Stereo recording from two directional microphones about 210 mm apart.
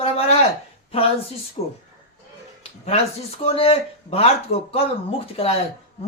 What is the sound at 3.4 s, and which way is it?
Speech, 25° left (ahead or behind).